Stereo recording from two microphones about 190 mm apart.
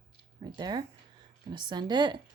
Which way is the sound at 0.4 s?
20° right (ahead or behind).